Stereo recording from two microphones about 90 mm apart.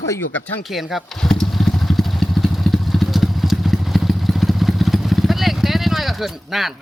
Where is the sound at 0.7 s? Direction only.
Centre (ahead or behind).